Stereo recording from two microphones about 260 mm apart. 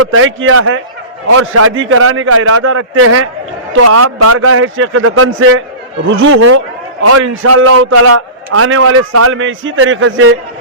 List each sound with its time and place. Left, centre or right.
0.0 s a man's voice: right
7.0 s a man's voice: right